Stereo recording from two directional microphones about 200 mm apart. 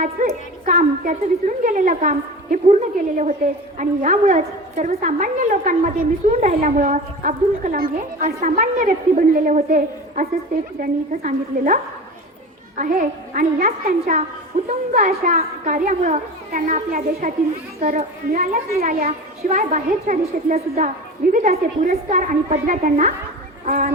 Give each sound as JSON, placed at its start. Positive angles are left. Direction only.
{"t": 0.0, "sound": "a woman's voice", "side_deg": -40}